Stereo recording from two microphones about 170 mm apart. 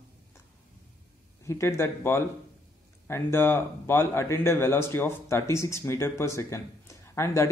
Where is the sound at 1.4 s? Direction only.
15° left (ahead or behind).